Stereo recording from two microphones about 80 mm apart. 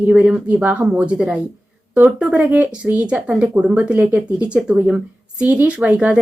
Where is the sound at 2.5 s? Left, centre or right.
Centre.